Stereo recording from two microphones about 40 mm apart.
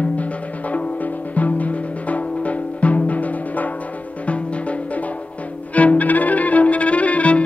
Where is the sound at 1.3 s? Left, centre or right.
Left.